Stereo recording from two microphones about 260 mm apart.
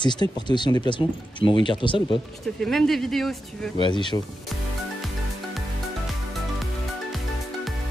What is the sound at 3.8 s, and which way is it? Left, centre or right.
Speech, centre.